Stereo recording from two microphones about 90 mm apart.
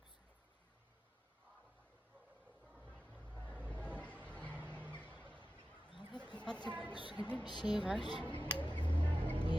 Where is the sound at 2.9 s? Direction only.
15° left (ahead or behind).